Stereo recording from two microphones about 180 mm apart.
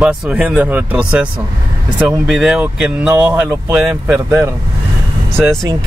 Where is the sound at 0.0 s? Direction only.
5° right (ahead or behind).